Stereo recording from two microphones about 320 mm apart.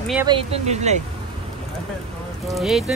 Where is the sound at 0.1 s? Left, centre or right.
Centre.